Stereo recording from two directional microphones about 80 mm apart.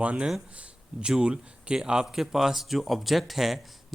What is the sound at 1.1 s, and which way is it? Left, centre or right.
Speech, centre.